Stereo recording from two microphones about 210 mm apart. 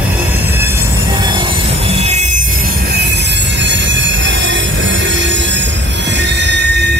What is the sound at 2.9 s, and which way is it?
Train wheels squealing, 50° right (ahead or behind).